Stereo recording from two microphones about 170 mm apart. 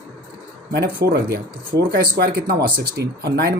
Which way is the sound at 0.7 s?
85° right.